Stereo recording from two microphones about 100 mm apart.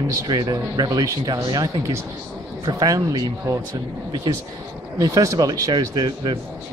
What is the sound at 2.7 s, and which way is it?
Speech, 40° right (ahead or behind).